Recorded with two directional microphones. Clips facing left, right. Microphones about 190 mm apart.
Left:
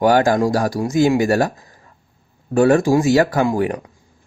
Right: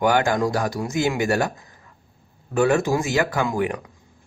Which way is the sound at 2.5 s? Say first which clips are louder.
Left 6 dB; 40° left (ahead or behind).